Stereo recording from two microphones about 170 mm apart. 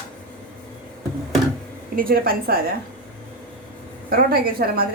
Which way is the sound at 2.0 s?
60° right (ahead or behind).